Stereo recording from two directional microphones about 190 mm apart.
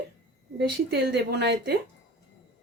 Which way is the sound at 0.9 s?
60° right (ahead or behind).